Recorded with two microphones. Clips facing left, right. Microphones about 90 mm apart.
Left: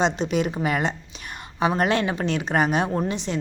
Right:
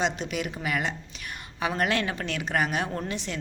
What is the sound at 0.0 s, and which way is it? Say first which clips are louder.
Speech: left 6 dB; 25° left (ahead or behind).